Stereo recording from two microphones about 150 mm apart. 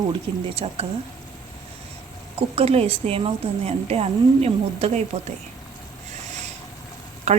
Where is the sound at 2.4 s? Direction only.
40° right (ahead or behind).